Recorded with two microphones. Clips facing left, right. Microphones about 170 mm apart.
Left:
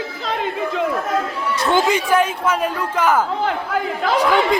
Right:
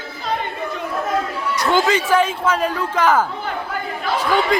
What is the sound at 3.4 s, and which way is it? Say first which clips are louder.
Speech: left 5 dB; 90° left.